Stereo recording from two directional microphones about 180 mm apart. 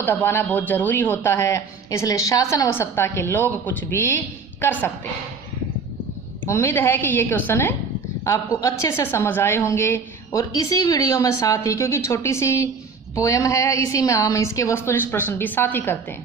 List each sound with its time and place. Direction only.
0.0 s a woman's voice: 10° left (ahead or behind)
6.4 s a woman's voice: 15° left (ahead or behind)